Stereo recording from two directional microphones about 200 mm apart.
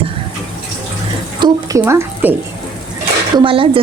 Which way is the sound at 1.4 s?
15° right (ahead or behind).